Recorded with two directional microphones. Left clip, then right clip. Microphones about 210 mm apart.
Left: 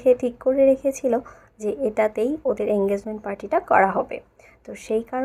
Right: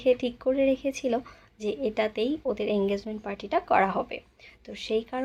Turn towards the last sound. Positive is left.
turn(degrees=0)  # may be behind; listen again after turning